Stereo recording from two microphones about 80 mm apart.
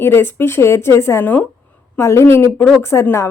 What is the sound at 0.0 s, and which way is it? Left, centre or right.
Speech, left.